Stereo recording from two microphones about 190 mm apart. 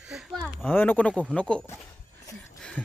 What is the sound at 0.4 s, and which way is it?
Speech, 10° left (ahead or behind).